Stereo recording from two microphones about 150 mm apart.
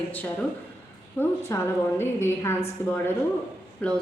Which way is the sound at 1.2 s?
15° left (ahead or behind).